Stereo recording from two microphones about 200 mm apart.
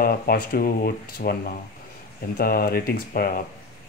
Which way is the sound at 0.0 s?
45° left (ahead or behind).